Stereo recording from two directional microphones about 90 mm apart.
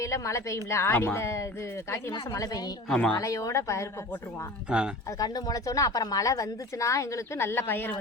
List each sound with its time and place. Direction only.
0.0 s a woman's voice: 35° left (ahead or behind)
2.9 s speech: 10° left (ahead or behind)
3.2 s a woman's voice: 40° left (ahead or behind)
5.2 s a woman's voice: 45° left (ahead or behind); by 7.9 s 25° left (ahead or behind)